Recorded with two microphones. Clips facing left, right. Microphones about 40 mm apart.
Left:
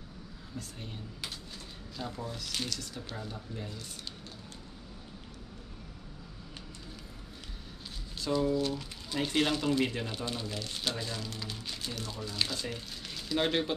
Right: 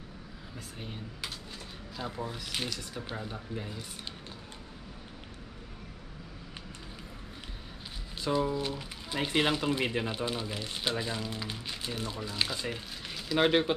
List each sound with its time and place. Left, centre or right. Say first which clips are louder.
0.6 s speech: even; centre
2.0 s speech: right 2 dB; centre
8.2 s speech: even; centre